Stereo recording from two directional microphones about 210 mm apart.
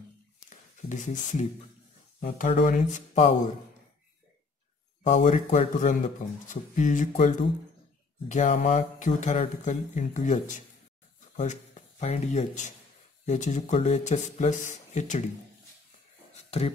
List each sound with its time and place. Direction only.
0.5 s speech: 35° left (ahead or behind)
5.0 s speech: 35° left (ahead or behind)
12.0 s speech: 30° left (ahead or behind)
16.3 s a sound: 30° left (ahead or behind)